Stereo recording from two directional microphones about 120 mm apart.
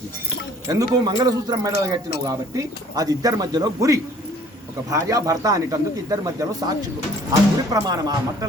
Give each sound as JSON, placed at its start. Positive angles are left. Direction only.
{"t": 0.7, "sound": "a man's voice", "side_deg": -30}